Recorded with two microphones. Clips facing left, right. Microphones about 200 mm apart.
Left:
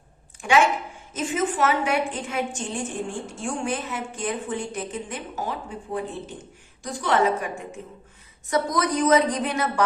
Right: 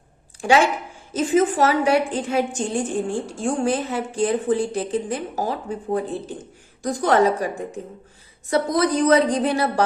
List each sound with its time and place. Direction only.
0.4 s a woman's voice: 35° right (ahead or behind)